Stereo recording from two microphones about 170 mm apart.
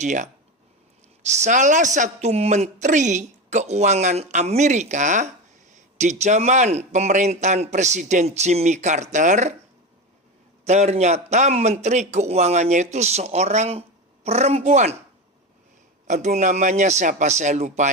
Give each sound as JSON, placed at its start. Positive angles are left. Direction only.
{"t": 0.0, "sound": "a woman's voice", "side_deg": -45}
{"t": 10.7, "sound": "a man's voice", "side_deg": -40}
{"t": 16.0, "sound": "a woman's voice", "side_deg": -45}